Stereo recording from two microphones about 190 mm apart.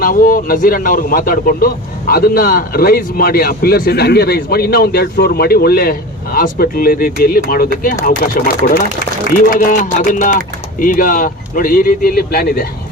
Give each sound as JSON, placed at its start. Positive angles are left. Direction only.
{"t": 0.0, "sound": "a man's voice", "side_deg": 45}